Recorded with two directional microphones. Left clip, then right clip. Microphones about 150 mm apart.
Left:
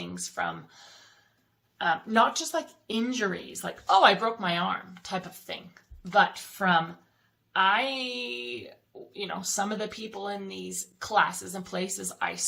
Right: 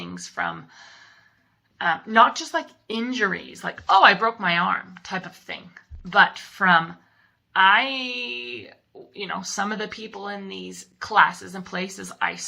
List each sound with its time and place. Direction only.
0.0 s speech: 40° left (ahead or behind)
6.6 s speech: 30° left (ahead or behind)